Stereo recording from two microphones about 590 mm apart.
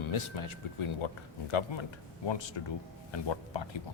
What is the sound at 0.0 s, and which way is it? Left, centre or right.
Speech, left.